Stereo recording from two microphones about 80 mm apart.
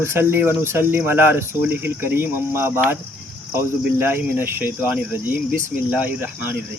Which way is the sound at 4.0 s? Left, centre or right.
Right.